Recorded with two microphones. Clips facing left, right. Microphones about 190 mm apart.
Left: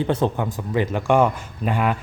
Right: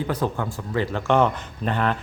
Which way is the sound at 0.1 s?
20° left (ahead or behind).